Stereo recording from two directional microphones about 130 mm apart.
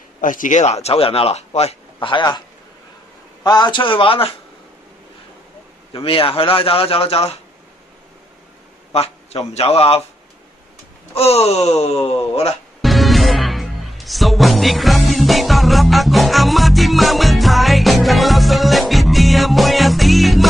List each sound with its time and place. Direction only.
0.2 s speech: 90° left; by 2.0 s 55° left (ahead or behind)
2.0 s a man's voice: 35° left (ahead or behind)
3.4 s a man's voice: 35° left (ahead or behind)
5.9 s a man's voice: 45° left (ahead or behind)
8.9 s a sound: 50° left (ahead or behind)
9.5 s a man's voice: 50° left (ahead or behind)
11.1 s a man's voice: 50° left (ahead or behind)
12.8 s music: centre (ahead or behind)